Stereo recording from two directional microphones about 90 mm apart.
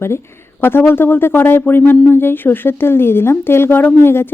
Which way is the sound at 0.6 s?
25° left (ahead or behind).